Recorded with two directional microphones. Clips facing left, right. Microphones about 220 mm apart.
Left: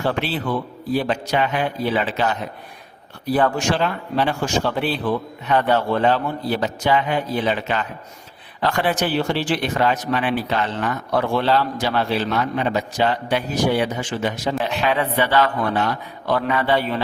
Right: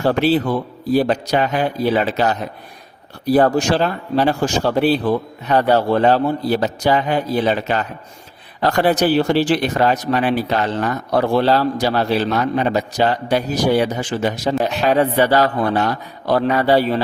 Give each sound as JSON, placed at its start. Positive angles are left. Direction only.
{"t": 0.0, "sound": "speech", "side_deg": -40}